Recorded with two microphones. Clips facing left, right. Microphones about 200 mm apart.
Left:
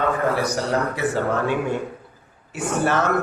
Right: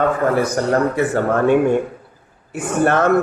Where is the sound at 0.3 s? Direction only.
55° right (ahead or behind).